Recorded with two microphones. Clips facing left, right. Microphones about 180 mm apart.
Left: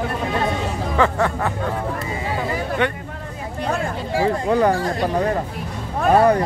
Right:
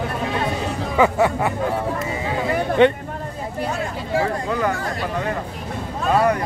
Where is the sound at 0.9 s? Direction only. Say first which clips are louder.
Right 3 dB; 10° right (ahead or behind).